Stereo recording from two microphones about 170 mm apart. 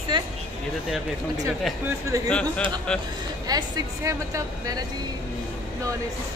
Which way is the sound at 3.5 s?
20° right (ahead or behind).